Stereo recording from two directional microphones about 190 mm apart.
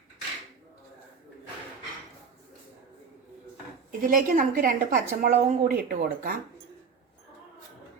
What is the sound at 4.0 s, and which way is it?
A woman's voice, 45° right (ahead or behind).